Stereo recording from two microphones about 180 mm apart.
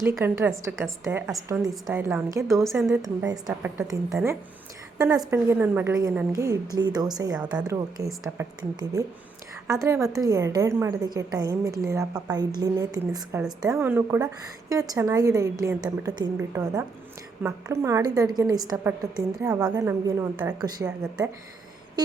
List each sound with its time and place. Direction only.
0.0 s a woman's voice: 15° right (ahead or behind)
19.0 s a woman's voice: 5° right (ahead or behind)
19.4 s a woman's voice: 20° right (ahead or behind)